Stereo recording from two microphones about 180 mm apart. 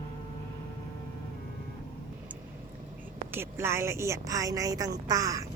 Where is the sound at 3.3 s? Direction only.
15° right (ahead or behind).